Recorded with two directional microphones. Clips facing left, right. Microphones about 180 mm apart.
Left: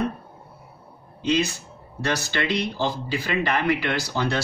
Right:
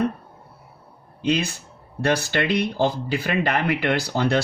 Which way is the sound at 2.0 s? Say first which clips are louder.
Right 4 dB; 55° right (ahead or behind).